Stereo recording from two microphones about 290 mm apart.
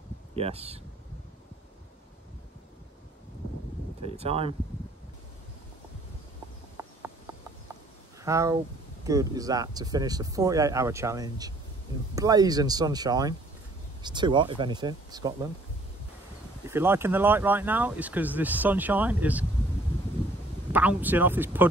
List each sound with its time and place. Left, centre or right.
0.4 s speech: centre
4.0 s speech: right
6.8 s clip-clop: centre
8.2 s speech: centre
16.6 s speech: centre
20.7 s speech: centre